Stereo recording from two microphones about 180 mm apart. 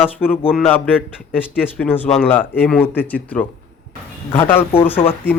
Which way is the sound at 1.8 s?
10° left (ahead or behind).